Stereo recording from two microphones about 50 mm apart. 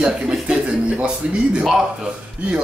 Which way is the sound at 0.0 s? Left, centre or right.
Centre.